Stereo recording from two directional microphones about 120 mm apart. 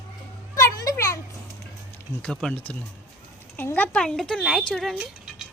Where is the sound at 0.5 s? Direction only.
30° left (ahead or behind).